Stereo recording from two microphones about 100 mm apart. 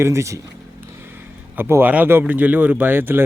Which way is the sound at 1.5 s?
20° right (ahead or behind).